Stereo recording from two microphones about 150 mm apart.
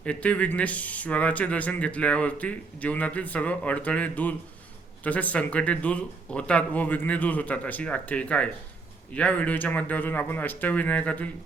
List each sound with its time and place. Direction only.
0.0 s speech: 10° left (ahead or behind)